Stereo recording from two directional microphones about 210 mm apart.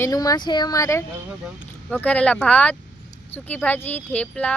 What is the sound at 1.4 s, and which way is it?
Speech, 5° left (ahead or behind).